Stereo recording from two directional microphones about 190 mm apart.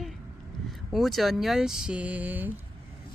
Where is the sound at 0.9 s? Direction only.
Centre (ahead or behind).